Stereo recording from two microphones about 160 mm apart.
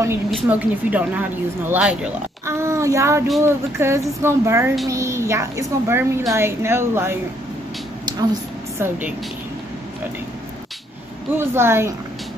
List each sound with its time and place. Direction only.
0.5 s speech: 10° right (ahead or behind)
8.2 s a sound: 25° right (ahead or behind)
8.8 s speech: 10° right (ahead or behind)
11.3 s speech: 15° right (ahead or behind)